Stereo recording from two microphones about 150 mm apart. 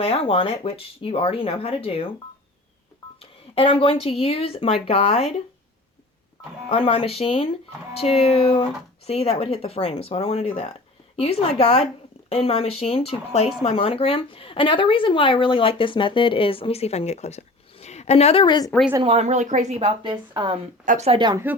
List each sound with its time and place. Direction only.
0.0 s speech: 40° left (ahead or behind)
3.2 s speech: 40° left (ahead or behind)
6.7 s a woman's voice: 40° left (ahead or behind)
19.0 s speech: 45° right (ahead or behind)
19.8 s a woman's voice: 35° right (ahead or behind)
20.8 s speech: 60° right (ahead or behind)
21.1 s a woman's voice: 30° right (ahead or behind)